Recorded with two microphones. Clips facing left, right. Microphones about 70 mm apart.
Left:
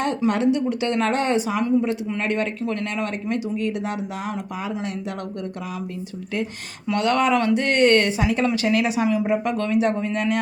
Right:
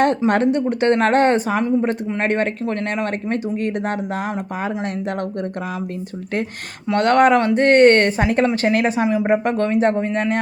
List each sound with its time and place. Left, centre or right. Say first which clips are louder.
0.3 s speech: right 3 dB; right
6.9 s speech: right 6 dB; right